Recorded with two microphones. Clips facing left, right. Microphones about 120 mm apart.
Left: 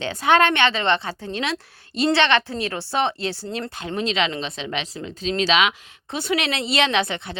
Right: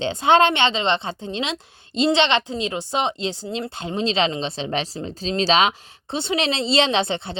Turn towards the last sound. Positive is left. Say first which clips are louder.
# right 1 dB
turn(degrees=-30)  # may be behind; listen again after turning